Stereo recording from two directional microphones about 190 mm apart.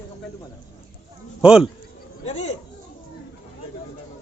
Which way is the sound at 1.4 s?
5° right (ahead or behind).